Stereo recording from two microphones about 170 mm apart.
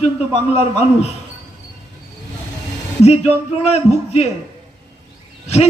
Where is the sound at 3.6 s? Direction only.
40° left (ahead or behind).